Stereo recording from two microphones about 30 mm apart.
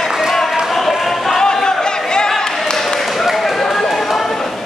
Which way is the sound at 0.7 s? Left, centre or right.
Centre.